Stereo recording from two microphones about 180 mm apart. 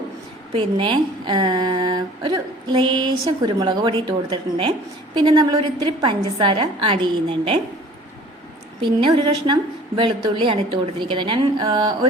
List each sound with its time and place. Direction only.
0.5 s a woman's voice: 30° right (ahead or behind)
8.8 s a woman's voice: 25° right (ahead or behind)